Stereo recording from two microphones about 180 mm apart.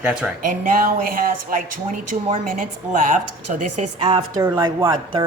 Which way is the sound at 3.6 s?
35° right (ahead or behind).